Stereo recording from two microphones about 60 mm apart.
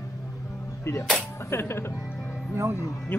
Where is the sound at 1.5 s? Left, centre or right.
Left.